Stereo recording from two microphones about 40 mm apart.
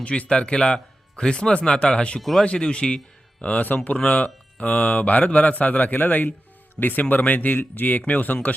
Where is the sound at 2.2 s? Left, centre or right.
Centre.